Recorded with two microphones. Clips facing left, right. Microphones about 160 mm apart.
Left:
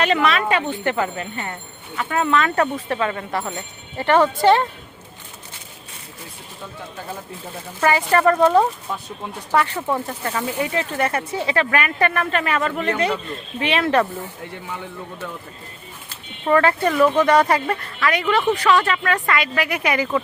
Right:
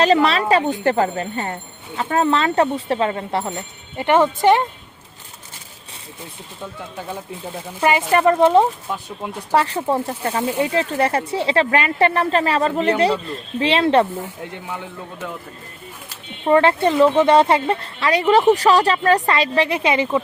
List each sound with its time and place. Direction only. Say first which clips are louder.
0.0 s speech: right 3 dB; 35° right (ahead or behind)
3.9 s speech: right 1 dB; 15° right (ahead or behind)
7.8 s speech: right 1 dB; 20° right (ahead or behind)
8.9 s speech: right 2 dB; 5° right (ahead or behind)
9.5 s speech: right 2 dB; 35° right (ahead or behind)
16.5 s speech: right 2 dB; 25° right (ahead or behind)